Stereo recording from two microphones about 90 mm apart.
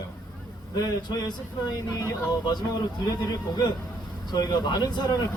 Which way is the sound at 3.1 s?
45° left (ahead or behind).